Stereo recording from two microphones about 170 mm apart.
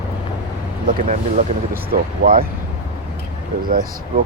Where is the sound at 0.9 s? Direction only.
50° right (ahead or behind).